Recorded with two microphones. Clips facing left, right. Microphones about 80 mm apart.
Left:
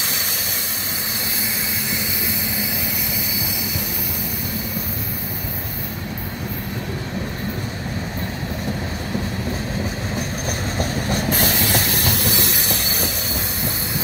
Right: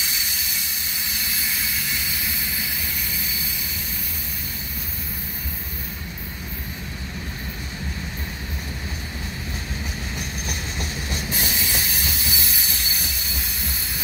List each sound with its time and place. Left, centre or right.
10.1 s train: left
11.2 s train: left